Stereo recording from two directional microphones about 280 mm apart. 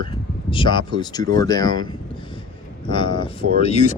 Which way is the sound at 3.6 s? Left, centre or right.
Left.